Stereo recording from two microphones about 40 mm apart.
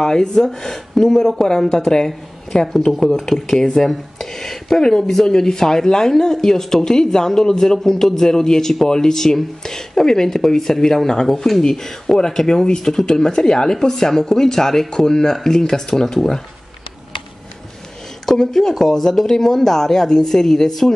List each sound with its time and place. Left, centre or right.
0.0 s speech: centre
18.2 s speech: centre